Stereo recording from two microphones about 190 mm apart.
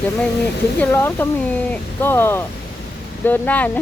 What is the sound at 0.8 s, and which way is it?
Speech, 10° left (ahead or behind).